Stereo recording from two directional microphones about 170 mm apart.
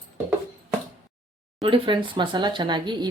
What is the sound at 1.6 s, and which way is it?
Speech, 30° right (ahead or behind).